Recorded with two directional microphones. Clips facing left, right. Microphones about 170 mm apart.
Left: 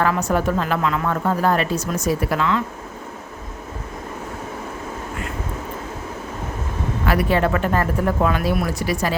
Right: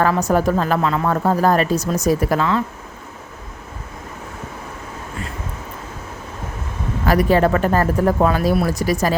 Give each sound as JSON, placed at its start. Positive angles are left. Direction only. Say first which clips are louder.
{"t": 0.0, "sound": "a woman's voice", "louder": "right 3 dB", "side_deg": -40}
{"t": 7.0, "sound": "a woman's voice", "louder": "right 4 dB", "side_deg": -40}